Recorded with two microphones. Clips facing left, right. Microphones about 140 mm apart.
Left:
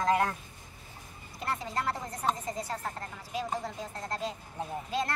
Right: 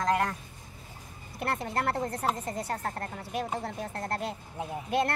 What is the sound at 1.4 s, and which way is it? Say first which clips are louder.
A woman's voice: right 3 dB; 60° right (ahead or behind).